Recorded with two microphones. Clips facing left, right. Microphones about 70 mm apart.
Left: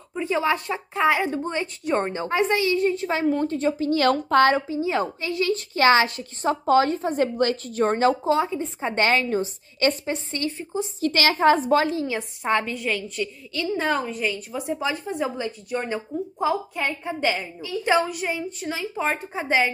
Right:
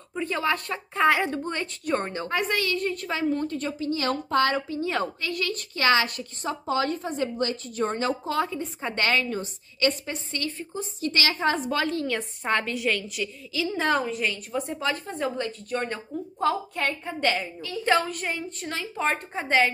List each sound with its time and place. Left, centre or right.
0.1 s speech: centre
0.9 s a woman's voice: centre
1.4 s a woman's voice: centre
3.3 s a woman's voice: left
4.0 s a woman's voice: left
4.6 s a woman's voice: centre
5.2 s a woman's voice: left
6.4 s a woman's voice: left
6.8 s a woman's voice: left
8.3 s a woman's voice: left
11.1 s a woman's voice: left
11.7 s a woman's voice: centre